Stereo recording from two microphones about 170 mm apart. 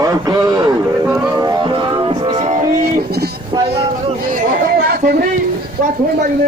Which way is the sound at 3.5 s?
25° right (ahead or behind).